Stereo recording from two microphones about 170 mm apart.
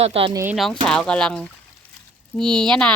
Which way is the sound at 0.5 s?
Centre (ahead or behind).